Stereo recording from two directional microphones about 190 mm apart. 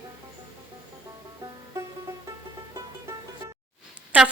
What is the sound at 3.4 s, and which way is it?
Music, 15° right (ahead or behind).